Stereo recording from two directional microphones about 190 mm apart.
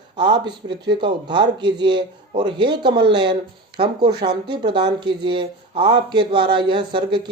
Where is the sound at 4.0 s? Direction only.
55° right (ahead or behind).